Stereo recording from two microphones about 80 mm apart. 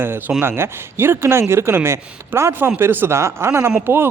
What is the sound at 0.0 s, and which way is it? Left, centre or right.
Speech, right.